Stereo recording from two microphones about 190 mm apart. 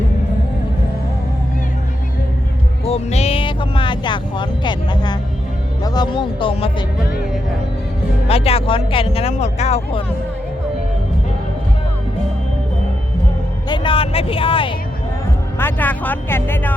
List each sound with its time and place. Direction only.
2.8 s speech: 30° left (ahead or behind)
8.3 s speech: 30° left (ahead or behind)
13.7 s speech: 25° left (ahead or behind)
15.5 s speech: 10° left (ahead or behind)